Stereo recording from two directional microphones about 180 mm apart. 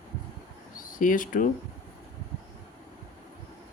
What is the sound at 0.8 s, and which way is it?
Speech, 45° left (ahead or behind).